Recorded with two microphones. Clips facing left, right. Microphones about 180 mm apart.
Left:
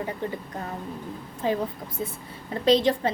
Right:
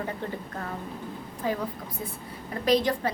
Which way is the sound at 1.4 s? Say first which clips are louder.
Left 4 dB; 25° left (ahead or behind).